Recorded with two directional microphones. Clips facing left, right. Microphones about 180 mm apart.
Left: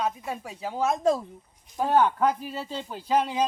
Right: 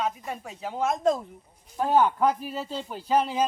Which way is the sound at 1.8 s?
10° right (ahead or behind).